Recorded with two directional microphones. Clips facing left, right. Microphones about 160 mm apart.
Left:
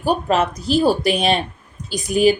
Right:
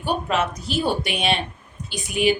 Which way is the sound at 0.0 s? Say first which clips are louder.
Left 5 dB; 40° left (ahead or behind).